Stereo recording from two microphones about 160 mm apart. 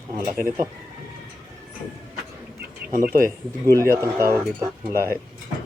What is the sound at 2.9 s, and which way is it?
Speech, 60° right (ahead or behind).